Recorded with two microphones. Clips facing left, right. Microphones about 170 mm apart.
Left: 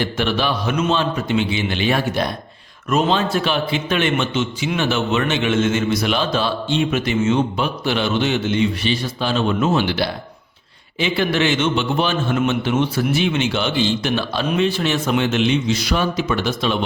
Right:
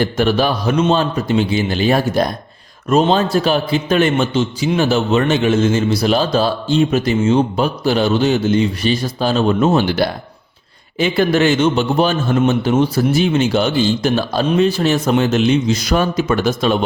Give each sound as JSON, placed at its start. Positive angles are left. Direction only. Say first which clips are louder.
{"t": 0.0, "sound": "a man's voice", "louder": "right 5 dB", "side_deg": -40}